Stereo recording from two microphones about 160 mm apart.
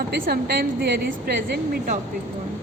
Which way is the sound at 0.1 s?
75° right (ahead or behind).